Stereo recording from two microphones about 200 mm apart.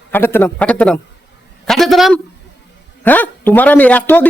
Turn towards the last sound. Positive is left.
turn(degrees=10)  # may be behind; listen again after turning